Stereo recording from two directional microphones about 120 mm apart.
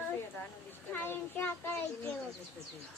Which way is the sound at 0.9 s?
15° left (ahead or behind).